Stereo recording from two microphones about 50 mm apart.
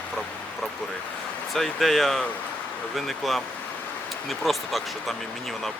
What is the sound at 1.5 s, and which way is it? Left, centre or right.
Speech, centre.